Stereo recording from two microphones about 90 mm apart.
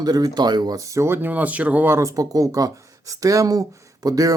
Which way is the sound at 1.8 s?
35° right (ahead or behind).